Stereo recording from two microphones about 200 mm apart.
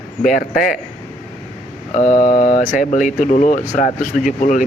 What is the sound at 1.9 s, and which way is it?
Speech, 35° left (ahead or behind).